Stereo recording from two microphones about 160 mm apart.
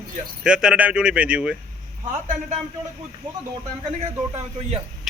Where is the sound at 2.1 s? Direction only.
50° right (ahead or behind).